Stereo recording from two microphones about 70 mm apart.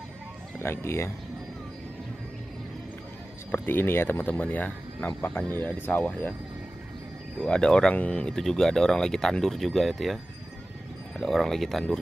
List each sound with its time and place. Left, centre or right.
0.6 s speech: left
3.5 s speech: left
7.3 s speech: centre
11.1 s speech: centre